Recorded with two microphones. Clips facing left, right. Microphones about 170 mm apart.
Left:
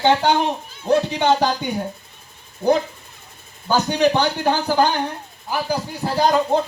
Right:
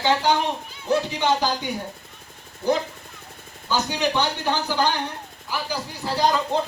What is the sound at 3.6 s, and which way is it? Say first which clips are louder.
A man's voice: left 6 dB; 60° left (ahead or behind).